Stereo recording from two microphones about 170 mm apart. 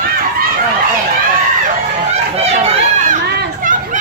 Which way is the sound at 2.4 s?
35° right (ahead or behind).